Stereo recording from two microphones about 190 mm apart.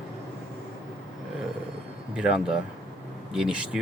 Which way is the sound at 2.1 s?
5° right (ahead or behind).